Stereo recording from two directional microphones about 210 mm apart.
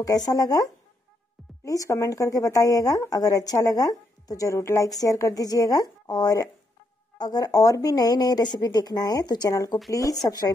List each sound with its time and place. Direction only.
0.0 s speech: 15° left (ahead or behind)